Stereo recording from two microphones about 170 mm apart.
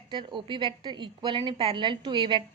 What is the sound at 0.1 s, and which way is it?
A woman's voice, 30° right (ahead or behind).